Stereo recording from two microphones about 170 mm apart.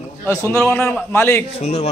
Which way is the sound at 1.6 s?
40° left (ahead or behind).